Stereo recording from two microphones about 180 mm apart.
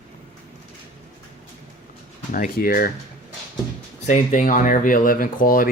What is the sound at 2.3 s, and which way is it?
Speech, 50° left (ahead or behind).